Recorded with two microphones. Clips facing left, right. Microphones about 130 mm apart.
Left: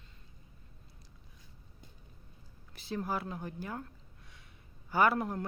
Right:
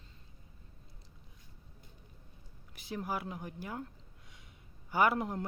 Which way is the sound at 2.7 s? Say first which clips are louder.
Left 2 dB; 15° right (ahead or behind).